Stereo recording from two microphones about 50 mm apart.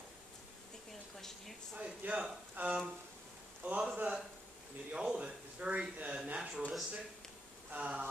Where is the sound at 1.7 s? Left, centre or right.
Right.